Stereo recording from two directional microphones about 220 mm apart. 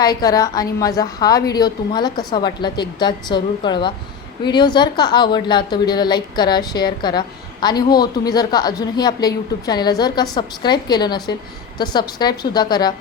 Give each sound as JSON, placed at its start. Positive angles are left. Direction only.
{"t": 0.0, "sound": "a woman's voice", "side_deg": 15}